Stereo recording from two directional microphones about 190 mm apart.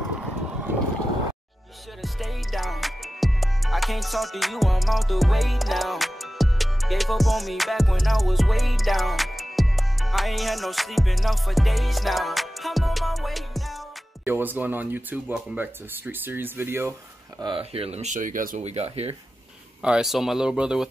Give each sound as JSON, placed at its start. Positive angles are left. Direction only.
{"t": 2.0, "sound": "music", "side_deg": 0}
{"t": 14.2, "sound": "speech", "side_deg": -10}
{"t": 17.4, "sound": "speech", "side_deg": -25}
{"t": 18.6, "sound": "speech", "side_deg": -35}
{"t": 19.8, "sound": "speech", "side_deg": -5}